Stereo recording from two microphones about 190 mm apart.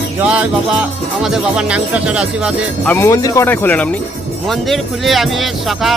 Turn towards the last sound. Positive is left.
turn(degrees=0)  # may be behind; listen again after turning